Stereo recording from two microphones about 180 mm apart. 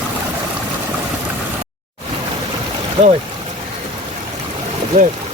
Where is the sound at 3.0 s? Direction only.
30° right (ahead or behind).